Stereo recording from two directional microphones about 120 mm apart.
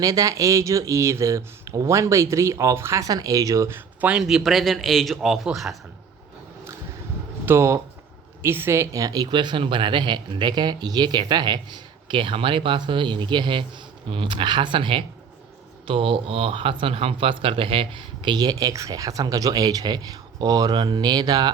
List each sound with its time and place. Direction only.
0.0 s speech: 30° right (ahead or behind); by 5.7 s centre (ahead or behind)
7.4 s speech: 20° right (ahead or behind)